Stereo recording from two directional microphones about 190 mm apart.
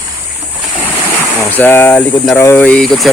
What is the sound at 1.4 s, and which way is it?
Speech, 10° left (ahead or behind).